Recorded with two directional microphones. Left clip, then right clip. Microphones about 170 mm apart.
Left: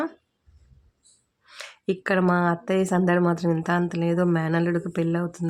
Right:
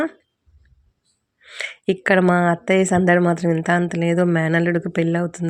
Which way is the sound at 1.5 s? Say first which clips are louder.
Right 6 dB; 25° right (ahead or behind).